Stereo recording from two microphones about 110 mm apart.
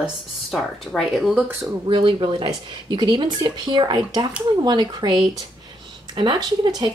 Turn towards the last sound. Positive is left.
turn(degrees=-45)  # may be behind; listen again after turning